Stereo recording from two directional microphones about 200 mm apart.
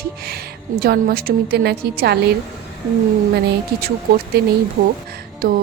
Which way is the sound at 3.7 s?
50° right (ahead or behind).